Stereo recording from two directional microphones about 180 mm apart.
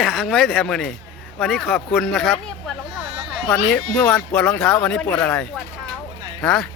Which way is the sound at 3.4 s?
5° left (ahead or behind).